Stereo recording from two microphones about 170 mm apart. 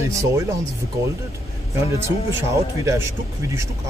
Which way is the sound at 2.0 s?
20° right (ahead or behind).